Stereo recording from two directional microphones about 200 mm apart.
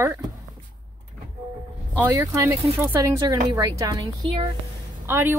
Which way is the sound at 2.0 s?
15° right (ahead or behind).